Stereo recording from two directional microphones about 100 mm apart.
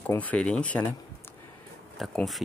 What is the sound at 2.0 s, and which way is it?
Speech, centre (ahead or behind).